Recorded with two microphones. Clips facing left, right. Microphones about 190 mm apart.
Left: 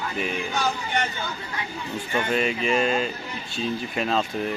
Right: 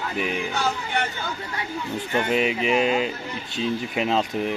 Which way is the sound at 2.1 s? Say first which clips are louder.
Right 2 dB; 10° right (ahead or behind).